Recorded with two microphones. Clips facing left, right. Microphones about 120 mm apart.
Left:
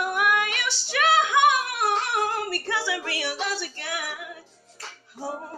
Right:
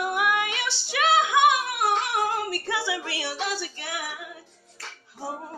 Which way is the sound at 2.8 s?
25° right (ahead or behind).